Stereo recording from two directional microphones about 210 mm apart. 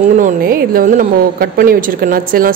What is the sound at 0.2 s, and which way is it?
A woman's voice, 40° right (ahead or behind).